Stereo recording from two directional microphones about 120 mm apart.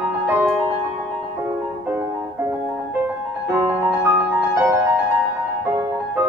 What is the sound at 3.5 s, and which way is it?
Music, 25° right (ahead or behind).